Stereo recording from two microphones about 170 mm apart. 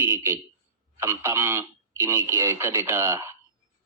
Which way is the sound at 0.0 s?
15° right (ahead or behind).